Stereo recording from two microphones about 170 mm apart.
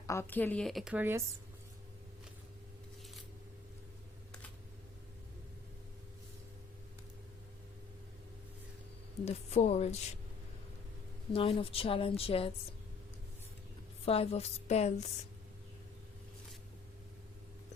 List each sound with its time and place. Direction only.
0.1 s a woman's voice: 15° left (ahead or behind)
0.9 s speech: 15° right (ahead or behind)
9.2 s a woman's voice: 40° left (ahead or behind)
11.3 s a woman's voice: 30° left (ahead or behind)
14.0 s a woman's voice: 35° left (ahead or behind)